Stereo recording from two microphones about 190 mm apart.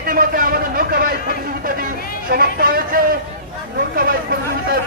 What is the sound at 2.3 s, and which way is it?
Speech, 50° right (ahead or behind).